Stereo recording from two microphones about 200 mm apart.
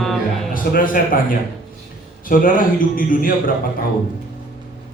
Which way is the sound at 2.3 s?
45° left (ahead or behind).